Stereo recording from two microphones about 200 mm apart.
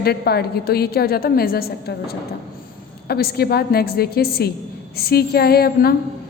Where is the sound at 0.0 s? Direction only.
50° left (ahead or behind).